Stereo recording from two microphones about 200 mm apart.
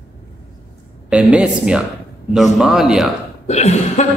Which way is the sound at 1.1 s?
5° right (ahead or behind).